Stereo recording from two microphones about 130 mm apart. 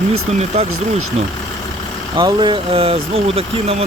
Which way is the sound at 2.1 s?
35° right (ahead or behind).